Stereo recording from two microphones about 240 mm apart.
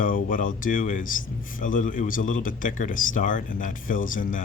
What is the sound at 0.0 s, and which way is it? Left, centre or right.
Speech, left.